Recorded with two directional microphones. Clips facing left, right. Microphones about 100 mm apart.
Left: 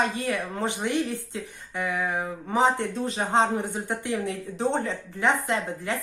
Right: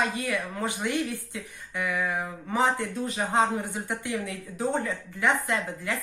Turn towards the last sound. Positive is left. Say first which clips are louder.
# left 2 dB
turn(degrees=25)  # may be behind; listen again after turning